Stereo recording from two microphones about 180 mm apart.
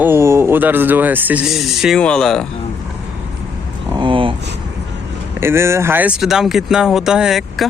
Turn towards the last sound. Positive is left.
turn(degrees=0)  # may be behind; listen again after turning